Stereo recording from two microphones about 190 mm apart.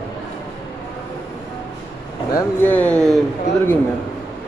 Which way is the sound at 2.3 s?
10° left (ahead or behind).